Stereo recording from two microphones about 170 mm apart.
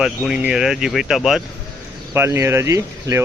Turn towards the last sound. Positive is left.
turn(degrees=-15)  # may be behind; listen again after turning